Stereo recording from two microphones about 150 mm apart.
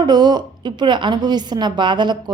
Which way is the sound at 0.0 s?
30° right (ahead or behind).